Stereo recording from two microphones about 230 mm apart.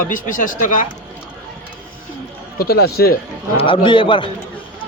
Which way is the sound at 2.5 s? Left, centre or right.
Left.